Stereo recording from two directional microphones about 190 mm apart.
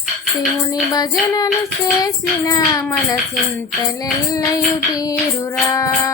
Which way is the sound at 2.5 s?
20° left (ahead or behind).